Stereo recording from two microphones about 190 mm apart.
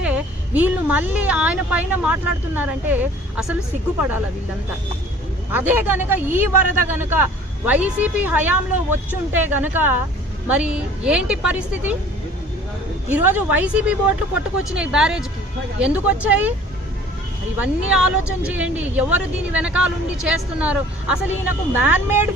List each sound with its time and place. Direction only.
0.0 s speech: 10° right (ahead or behind)
5.5 s a woman's voice: 10° right (ahead or behind)
13.1 s a woman's voice: 10° right (ahead or behind)
17.9 s speech: 5° right (ahead or behind)